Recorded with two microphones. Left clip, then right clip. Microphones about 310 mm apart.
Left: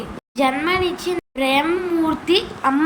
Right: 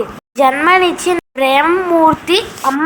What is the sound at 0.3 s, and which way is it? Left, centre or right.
Speech, centre.